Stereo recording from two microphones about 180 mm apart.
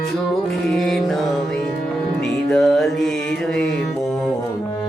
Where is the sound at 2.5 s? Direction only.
Centre (ahead or behind).